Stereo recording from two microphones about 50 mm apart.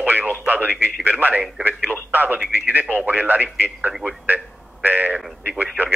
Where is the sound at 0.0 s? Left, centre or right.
Right.